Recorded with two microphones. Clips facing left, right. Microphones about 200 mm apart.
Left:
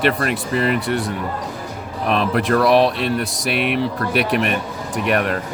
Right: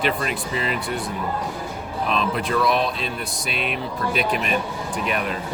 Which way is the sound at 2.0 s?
65° left (ahead or behind).